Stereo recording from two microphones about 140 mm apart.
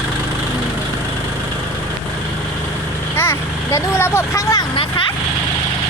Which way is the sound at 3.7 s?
20° left (ahead or behind).